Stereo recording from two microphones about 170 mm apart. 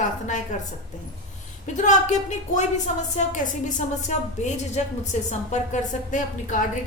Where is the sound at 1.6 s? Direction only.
45° left (ahead or behind).